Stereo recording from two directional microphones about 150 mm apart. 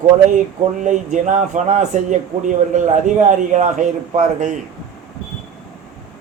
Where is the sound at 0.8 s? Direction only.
55° right (ahead or behind).